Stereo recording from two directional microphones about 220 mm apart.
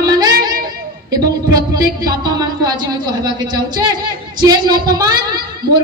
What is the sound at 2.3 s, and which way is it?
A woman's voice, 20° right (ahead or behind).